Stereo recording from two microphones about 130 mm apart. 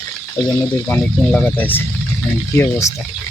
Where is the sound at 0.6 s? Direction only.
10° left (ahead or behind).